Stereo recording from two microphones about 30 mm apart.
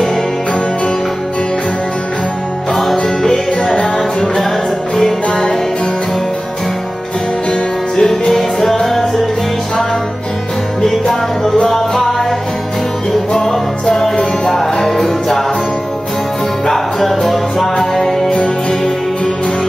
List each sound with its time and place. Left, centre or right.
2.7 s music: centre
4.9 s music: centre
7.9 s music: centre
10.8 s music: centre
13.3 s music: left
14.5 s music: centre
16.6 s music: centre